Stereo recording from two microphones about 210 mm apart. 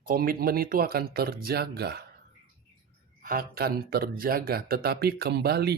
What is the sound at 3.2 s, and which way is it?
Speech, 45° right (ahead or behind).